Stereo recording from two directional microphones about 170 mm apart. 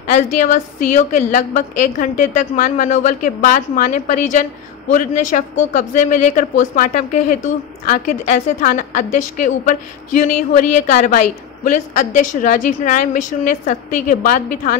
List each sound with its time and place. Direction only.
0.1 s speech: 45° left (ahead or behind)